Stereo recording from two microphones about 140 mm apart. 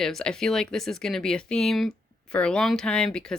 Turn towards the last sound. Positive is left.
turn(degrees=5)  # may be behind; listen again after turning